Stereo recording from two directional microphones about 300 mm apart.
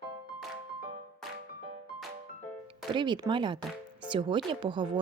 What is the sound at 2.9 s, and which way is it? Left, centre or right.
Speech, centre.